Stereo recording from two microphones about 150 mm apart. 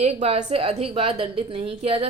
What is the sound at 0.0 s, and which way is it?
A woman's voice, 45° right (ahead or behind).